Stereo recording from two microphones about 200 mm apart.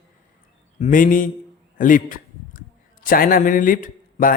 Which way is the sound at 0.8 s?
40° left (ahead or behind).